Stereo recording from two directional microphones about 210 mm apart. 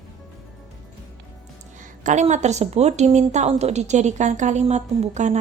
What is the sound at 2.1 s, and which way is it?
A woman's voice, 35° right (ahead or behind).